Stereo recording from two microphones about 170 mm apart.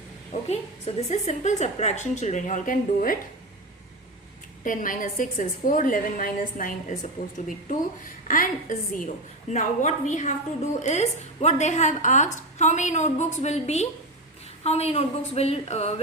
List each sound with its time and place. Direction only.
0.4 s a woman's voice: 40° left (ahead or behind)
4.6 s a woman's voice: 50° left (ahead or behind)